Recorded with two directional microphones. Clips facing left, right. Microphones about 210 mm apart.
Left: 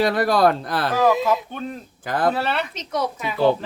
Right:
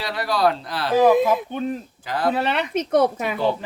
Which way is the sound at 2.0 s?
50° left (ahead or behind).